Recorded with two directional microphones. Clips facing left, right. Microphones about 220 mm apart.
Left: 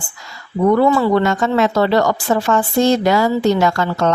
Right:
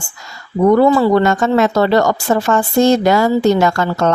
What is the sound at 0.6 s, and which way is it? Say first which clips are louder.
A woman's voice: right 3 dB; 40° right (ahead or behind).